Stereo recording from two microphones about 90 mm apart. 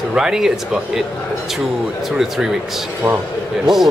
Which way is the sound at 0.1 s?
5° right (ahead or behind).